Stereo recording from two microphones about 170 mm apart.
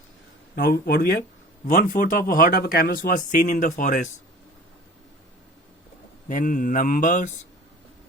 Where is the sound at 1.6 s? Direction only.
55° left (ahead or behind).